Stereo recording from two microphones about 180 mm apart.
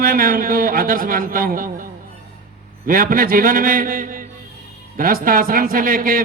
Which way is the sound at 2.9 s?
50° right (ahead or behind).